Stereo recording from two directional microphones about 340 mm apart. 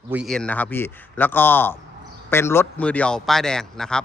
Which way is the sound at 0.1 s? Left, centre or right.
Centre.